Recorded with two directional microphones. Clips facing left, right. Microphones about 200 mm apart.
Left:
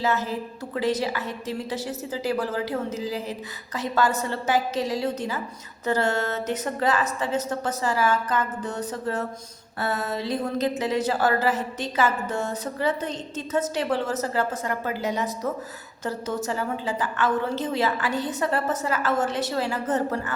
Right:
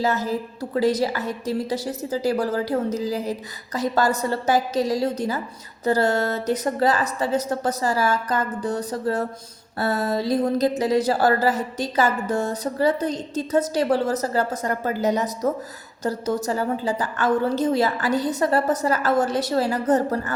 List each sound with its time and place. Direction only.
0.0 s speech: 40° right (ahead or behind)